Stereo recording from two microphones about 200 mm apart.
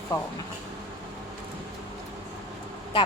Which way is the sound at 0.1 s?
15° left (ahead or behind).